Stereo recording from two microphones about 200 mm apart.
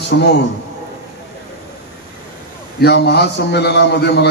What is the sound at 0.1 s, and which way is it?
Speech, 65° left (ahead or behind).